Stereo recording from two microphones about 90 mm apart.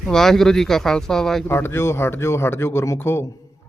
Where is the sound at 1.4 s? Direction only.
25° left (ahead or behind).